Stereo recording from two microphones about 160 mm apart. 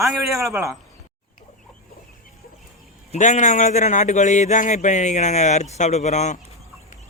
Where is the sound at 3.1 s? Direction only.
45° left (ahead or behind).